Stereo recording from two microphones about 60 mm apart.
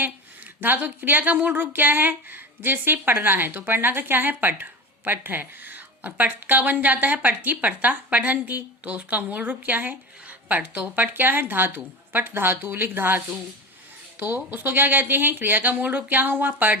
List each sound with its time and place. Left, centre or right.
0.6 s speech: right